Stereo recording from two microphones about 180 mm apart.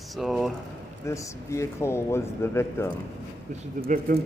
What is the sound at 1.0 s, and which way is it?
A man's voice, 15° left (ahead or behind).